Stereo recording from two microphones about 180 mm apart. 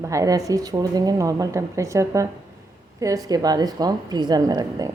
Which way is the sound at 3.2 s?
20° right (ahead or behind).